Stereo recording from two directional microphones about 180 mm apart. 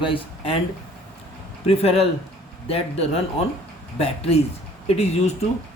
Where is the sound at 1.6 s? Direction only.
35° left (ahead or behind).